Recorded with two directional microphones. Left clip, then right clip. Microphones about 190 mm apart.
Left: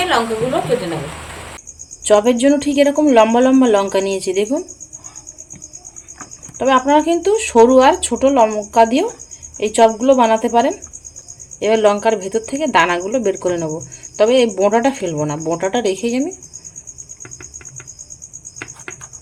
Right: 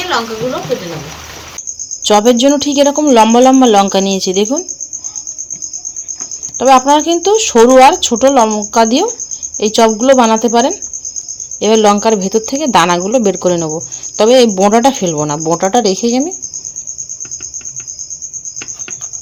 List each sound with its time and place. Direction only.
2.0 s speech: 40° right (ahead or behind)
6.6 s speech: 40° right (ahead or behind)